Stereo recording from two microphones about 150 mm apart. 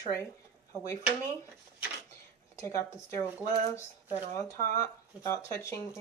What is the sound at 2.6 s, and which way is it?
Speech, 20° left (ahead or behind).